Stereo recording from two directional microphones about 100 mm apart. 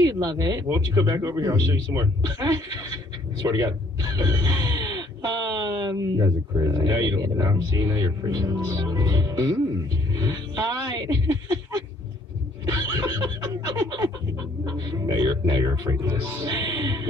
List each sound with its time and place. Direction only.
0.0 s speech: 45° right (ahead or behind)
10.1 s music: 40° right (ahead or behind)
12.6 s snicker: 40° right (ahead or behind)
14.6 s speech: 45° right (ahead or behind)